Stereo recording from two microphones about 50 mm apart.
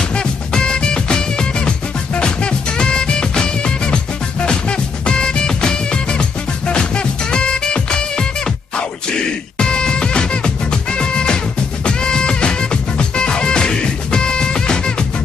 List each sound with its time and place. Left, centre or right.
0.1 s music: centre
9.6 s music: centre